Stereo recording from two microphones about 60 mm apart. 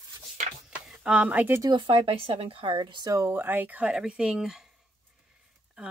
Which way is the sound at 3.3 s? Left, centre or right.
Right.